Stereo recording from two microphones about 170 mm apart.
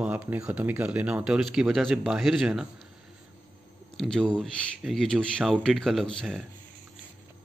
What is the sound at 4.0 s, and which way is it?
Speech, centre (ahead or behind).